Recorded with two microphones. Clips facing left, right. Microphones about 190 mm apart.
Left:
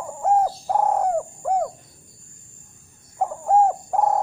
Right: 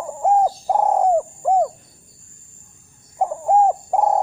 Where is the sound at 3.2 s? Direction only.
15° right (ahead or behind).